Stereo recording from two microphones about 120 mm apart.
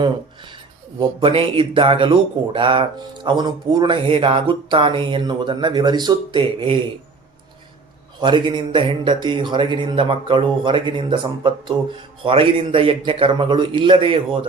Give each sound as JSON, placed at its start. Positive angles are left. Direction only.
{"t": 0.9, "sound": "speech", "side_deg": -50}
{"t": 8.2, "sound": "speech", "side_deg": -40}